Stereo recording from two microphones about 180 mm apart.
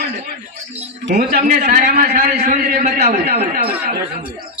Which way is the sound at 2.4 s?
45° right (ahead or behind).